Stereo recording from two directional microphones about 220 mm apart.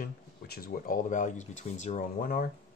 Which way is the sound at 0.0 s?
40° left (ahead or behind).